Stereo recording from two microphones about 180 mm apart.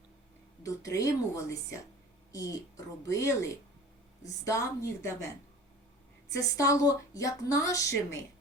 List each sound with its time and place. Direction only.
0.6 s a woman's voice: 20° left (ahead or behind)